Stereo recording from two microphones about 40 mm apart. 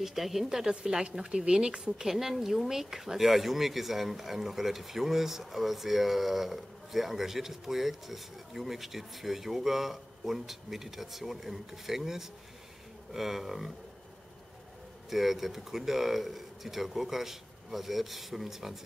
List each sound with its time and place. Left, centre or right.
0.0 s speech: centre
15.0 s speech: centre